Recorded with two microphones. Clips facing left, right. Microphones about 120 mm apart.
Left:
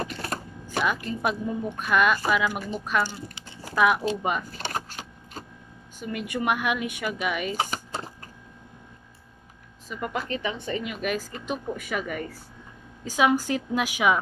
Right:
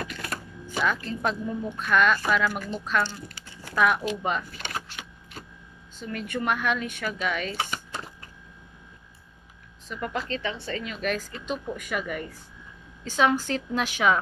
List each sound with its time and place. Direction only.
0.0 s camera: 35° left (ahead or behind)
0.8 s speech: 10° left (ahead or behind)
3.7 s speech: 5° left (ahead or behind)
4.5 s vehicle: 35° left (ahead or behind)
5.9 s speech: 10° left (ahead or behind)
7.5 s a sound: 35° left (ahead or behind)
9.8 s speech: 10° left (ahead or behind)